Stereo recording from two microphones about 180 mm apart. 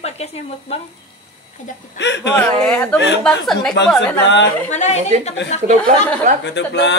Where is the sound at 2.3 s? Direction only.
10° left (ahead or behind).